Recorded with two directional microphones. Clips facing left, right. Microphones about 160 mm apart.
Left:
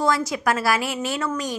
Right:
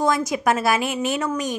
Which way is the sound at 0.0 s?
20° right (ahead or behind).